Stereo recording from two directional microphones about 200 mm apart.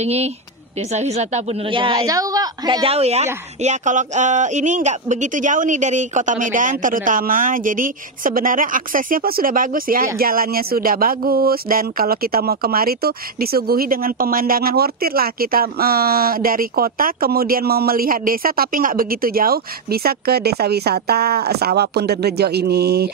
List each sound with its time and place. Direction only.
0.0 s a woman's voice: 30° right (ahead or behind); by 23.1 s 55° right (ahead or behind)